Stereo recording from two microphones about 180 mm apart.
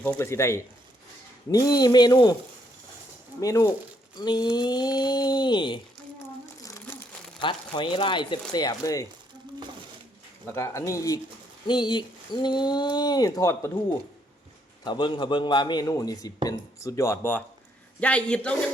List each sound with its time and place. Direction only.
0.0 s a man's voice: 10° left (ahead or behind)
3.4 s a man's voice: 15° left (ahead or behind)
6.6 s crumpling: 20° left (ahead or behind)
7.4 s a man's voice: 25° left (ahead or behind)
10.4 s a man's voice: 15° left (ahead or behind)
14.8 s a man's voice: 25° left (ahead or behind); by 18.5 s 5° left (ahead or behind)